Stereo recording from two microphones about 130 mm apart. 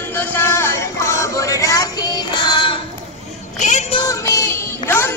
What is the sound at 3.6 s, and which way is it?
Music, 65° left (ahead or behind).